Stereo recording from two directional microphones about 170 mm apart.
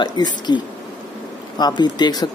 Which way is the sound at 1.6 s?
25° left (ahead or behind).